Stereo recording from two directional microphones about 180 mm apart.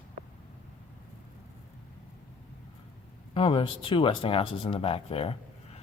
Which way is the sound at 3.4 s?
30° left (ahead or behind).